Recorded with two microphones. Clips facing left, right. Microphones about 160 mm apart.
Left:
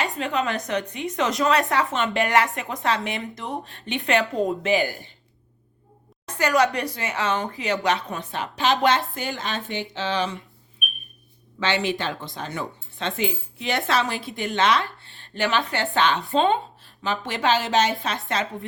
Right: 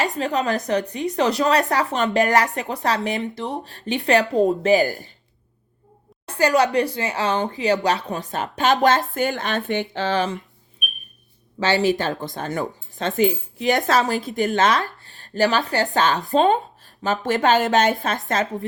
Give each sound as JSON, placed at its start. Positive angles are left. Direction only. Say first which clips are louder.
{"t": 0.2, "sound": "a woman's voice", "louder": "right 3 dB", "side_deg": -35}
{"t": 6.2, "sound": "a woman's voice", "louder": "right 3 dB", "side_deg": -30}
{"t": 11.6, "sound": "speech", "louder": "right 5 dB", "side_deg": -40}